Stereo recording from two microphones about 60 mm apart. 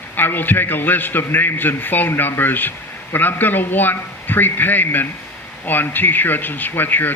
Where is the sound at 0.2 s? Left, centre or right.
Left.